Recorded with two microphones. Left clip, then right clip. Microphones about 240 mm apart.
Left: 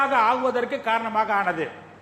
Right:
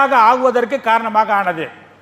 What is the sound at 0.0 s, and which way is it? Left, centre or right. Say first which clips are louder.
A man's voice: right 9 dB; right.